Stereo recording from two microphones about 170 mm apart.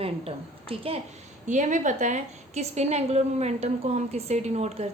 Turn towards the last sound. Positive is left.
turn(degrees=-40)  # may be behind; listen again after turning